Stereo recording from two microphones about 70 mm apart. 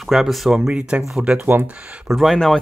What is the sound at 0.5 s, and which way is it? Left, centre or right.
Speech, centre.